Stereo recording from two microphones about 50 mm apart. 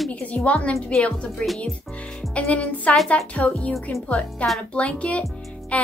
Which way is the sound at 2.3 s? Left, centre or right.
Left.